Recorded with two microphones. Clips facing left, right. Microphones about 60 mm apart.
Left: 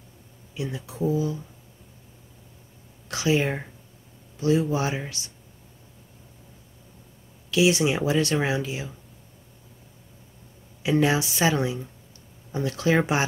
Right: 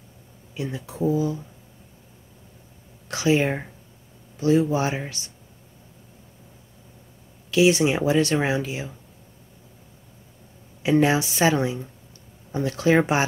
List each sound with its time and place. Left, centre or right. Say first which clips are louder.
0.6 s speech: right 2 dB; right
3.1 s speech: right 3 dB; right
7.5 s speech: right 3 dB; right
10.8 s speech: right 3 dB; right